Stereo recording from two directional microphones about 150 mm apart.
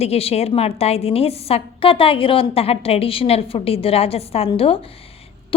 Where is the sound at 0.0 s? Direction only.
40° left (ahead or behind).